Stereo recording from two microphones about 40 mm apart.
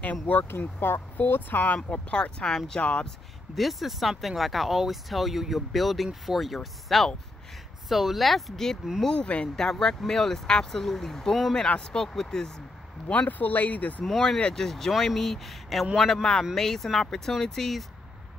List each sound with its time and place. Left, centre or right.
0.0 s speech: left
0.5 s speech: left
1.2 s speech: left
1.9 s speech: left
3.5 s speech: centre
9.1 s speech: left
9.6 s speech: centre
11.5 s speech: left
13.1 s speech: left
14.0 s speech: centre